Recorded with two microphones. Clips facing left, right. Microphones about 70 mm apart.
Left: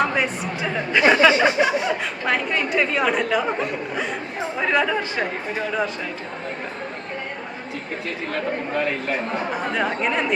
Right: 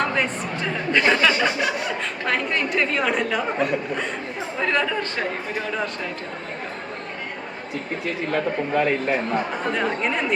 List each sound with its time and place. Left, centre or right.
0.0 s speech: centre
2.2 s speech: centre
8.3 s a man's voice: right
9.7 s speech: centre